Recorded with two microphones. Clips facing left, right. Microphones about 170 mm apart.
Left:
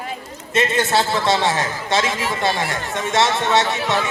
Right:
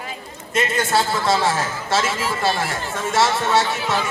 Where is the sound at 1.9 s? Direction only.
20° left (ahead or behind).